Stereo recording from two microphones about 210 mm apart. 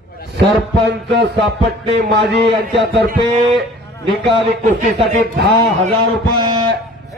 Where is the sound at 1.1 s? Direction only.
55° right (ahead or behind).